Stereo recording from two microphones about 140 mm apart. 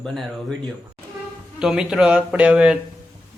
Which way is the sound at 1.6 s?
5° right (ahead or behind).